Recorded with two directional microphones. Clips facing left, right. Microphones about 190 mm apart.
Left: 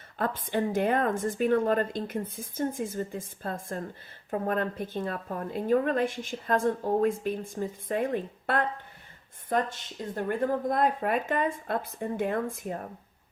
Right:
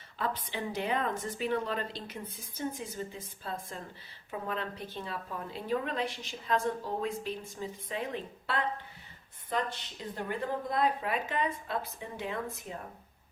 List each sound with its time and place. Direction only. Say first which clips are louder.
0.2 s a woman's voice: left 7 dB; 50° left (ahead or behind)